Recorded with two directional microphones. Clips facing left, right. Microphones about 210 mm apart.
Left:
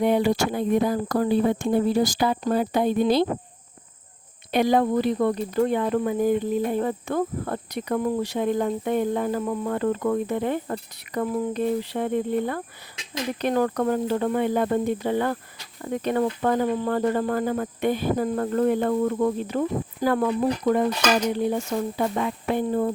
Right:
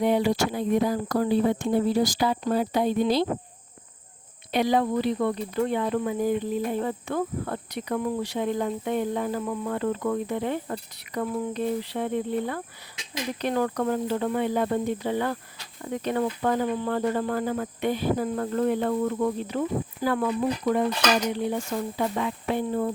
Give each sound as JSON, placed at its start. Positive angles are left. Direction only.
{"t": 0.0, "sound": "cricket", "side_deg": 50}
{"t": 4.5, "sound": "cricket", "side_deg": 50}
{"t": 21.9, "sound": "cricket", "side_deg": 45}